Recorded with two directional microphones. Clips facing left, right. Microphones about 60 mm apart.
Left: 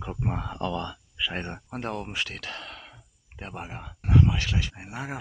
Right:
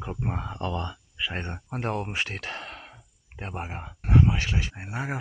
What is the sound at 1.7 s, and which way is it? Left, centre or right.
Speech, right.